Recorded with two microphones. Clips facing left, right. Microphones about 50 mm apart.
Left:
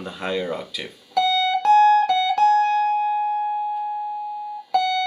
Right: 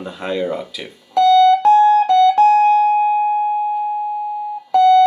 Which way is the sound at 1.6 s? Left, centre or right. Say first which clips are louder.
Right 4 dB; right.